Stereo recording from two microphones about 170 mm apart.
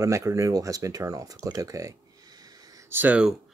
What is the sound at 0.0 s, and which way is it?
Speech, 20° right (ahead or behind).